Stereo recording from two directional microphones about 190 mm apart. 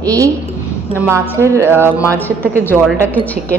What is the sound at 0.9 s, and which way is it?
Speech, 10° right (ahead or behind).